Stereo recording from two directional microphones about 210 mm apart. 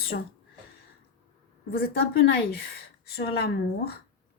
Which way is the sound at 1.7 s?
50° left (ahead or behind).